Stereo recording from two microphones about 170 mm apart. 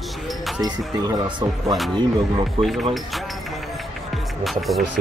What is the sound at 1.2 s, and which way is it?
Speech, 30° right (ahead or behind).